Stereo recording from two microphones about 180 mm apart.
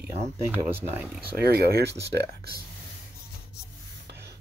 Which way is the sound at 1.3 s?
60° right (ahead or behind).